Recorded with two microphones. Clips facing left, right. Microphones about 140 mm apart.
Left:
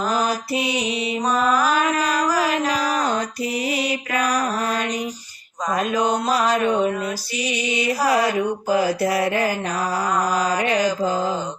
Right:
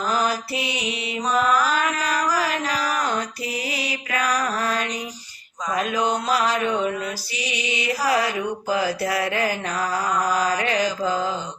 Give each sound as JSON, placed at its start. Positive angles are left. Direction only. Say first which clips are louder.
{"t": 0.5, "sound": "mantra", "louder": "left 5 dB", "side_deg": 20}
{"t": 1.2, "sound": "mantra", "louder": "even", "side_deg": 45}
{"t": 1.8, "sound": "mantra", "louder": "left 3 dB", "side_deg": 30}
{"t": 2.6, "sound": "music", "louder": "left 3 dB", "side_deg": 45}
{"t": 3.5, "sound": "mantra", "louder": "left 6 dB", "side_deg": 25}
{"t": 5.7, "sound": "mantra", "louder": "left 2 dB", "side_deg": 45}
{"t": 8.0, "sound": "mantra", "louder": "left 2 dB", "side_deg": 25}
{"t": 8.3, "sound": "speech", "louder": "left 4 dB", "side_deg": 45}
{"t": 9.0, "sound": "mantra", "louder": "left 3 dB", "side_deg": 30}
{"t": 10.8, "sound": "speech", "louder": "left 2 dB", "side_deg": 45}